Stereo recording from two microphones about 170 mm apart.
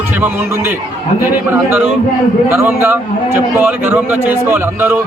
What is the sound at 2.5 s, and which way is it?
A man's voice, 15° right (ahead or behind).